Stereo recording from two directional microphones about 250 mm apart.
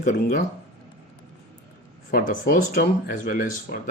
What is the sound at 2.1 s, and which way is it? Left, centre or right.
Speech, left.